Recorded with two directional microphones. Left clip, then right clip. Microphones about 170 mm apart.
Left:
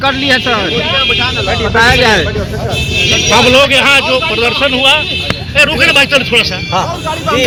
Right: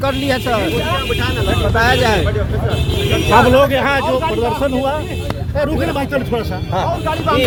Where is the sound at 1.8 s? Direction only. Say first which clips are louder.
Left 7 dB; 5° right (ahead or behind).